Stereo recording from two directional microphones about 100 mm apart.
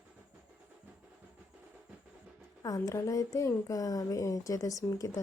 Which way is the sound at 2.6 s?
35° left (ahead or behind).